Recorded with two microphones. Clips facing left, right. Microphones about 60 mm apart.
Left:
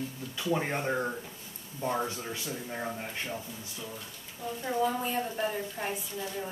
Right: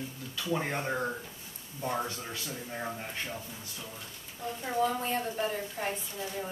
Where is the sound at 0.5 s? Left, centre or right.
Centre.